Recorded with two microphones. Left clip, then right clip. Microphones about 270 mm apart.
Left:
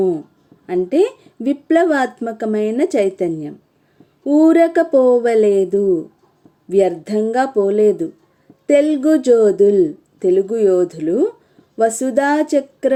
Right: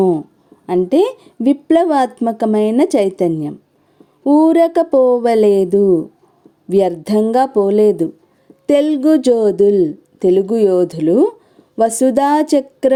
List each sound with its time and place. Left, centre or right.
0.7 s a woman's voice: right